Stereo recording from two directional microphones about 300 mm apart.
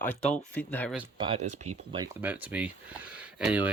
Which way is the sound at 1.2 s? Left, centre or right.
Centre.